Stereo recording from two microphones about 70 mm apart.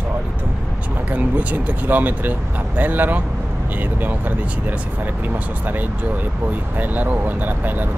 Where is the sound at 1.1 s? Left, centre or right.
Right.